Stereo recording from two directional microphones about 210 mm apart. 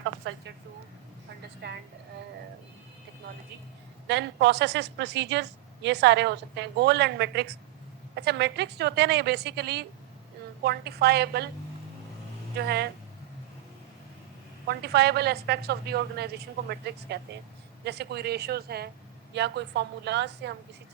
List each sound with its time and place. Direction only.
0.0 s a sound: 65° right (ahead or behind)
4.0 s a woman's voice: 55° right (ahead or behind)
12.5 s a woman's voice: 50° right (ahead or behind)
14.7 s a woman's voice: 50° right (ahead or behind)